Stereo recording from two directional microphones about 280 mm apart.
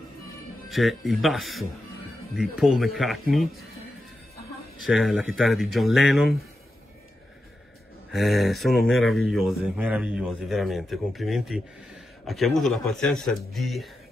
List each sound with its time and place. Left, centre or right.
0.7 s speech: centre
4.8 s speech: centre
8.1 s speech: centre